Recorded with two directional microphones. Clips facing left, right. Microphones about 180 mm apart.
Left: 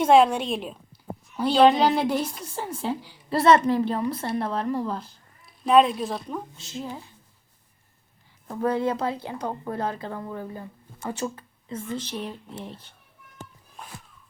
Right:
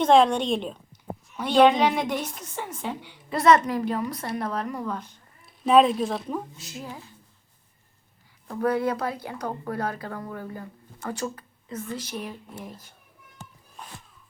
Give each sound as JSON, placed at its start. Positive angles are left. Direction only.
{"t": 0.0, "sound": "a woman's voice", "side_deg": 5}
{"t": 1.8, "sound": "a woman's voice", "side_deg": 30}
{"t": 5.5, "sound": "speech", "side_deg": 0}
{"t": 8.4, "sound": "a woman's voice", "side_deg": 25}
{"t": 11.9, "sound": "a woman's voice", "side_deg": -10}
{"t": 12.2, "sound": "a woman's voice", "side_deg": 30}